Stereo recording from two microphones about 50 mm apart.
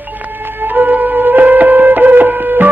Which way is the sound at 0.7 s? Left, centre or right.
Right.